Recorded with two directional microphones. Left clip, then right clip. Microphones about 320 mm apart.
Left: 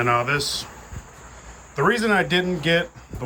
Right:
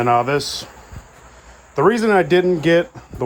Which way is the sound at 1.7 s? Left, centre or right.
Centre.